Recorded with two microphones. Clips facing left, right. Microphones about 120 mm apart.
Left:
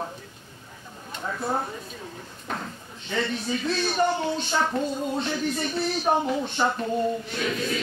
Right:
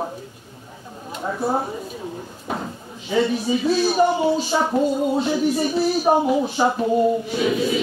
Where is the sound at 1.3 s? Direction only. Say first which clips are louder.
Right 5 dB; 25° right (ahead or behind).